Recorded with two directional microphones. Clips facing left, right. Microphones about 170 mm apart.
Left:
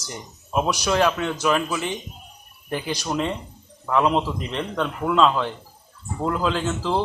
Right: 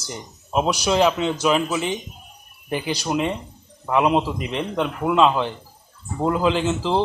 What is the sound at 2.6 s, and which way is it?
A man's voice, 10° right (ahead or behind).